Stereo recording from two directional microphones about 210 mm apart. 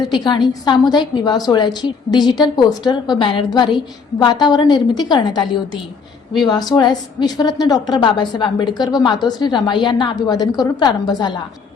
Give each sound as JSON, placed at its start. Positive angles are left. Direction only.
{"t": 0.0, "sound": "a woman's voice", "side_deg": 20}